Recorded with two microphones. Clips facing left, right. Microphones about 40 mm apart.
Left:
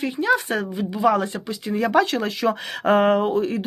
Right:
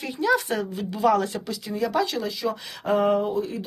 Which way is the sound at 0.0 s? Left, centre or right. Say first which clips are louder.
Left 2 dB; left.